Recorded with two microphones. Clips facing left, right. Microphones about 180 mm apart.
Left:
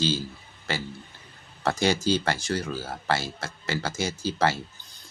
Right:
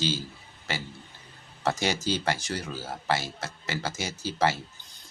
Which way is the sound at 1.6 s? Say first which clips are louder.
Left 3 dB; 15° right (ahead or behind).